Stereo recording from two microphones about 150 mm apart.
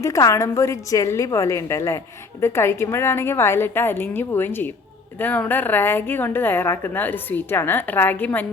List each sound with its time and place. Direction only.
0.0 s a woman's voice: 20° left (ahead or behind)